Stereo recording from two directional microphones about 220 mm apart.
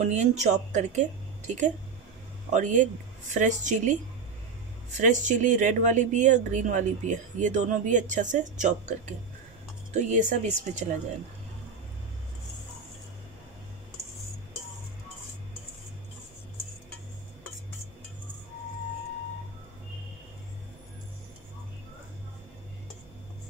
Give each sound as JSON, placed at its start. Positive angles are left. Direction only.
{"t": 0.0, "sound": "speech", "side_deg": -30}
{"t": 2.5, "sound": "speech", "side_deg": -35}
{"t": 5.0, "sound": "speech", "side_deg": -35}
{"t": 9.9, "sound": "speech", "side_deg": -35}